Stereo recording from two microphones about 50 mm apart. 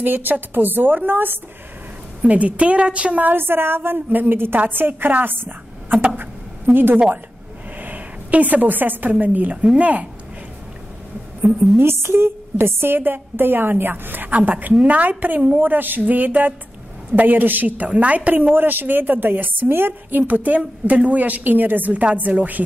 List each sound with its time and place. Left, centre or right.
0.0 s speech: right
2.2 s a woman's voice: right
3.3 s a woman's voice: right
6.1 s a sound: right
7.8 s a sound: right
9.1 s a woman's voice: right
11.7 s speech: right